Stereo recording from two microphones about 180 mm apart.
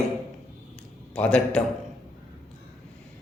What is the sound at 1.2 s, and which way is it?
Speech, 5° left (ahead or behind).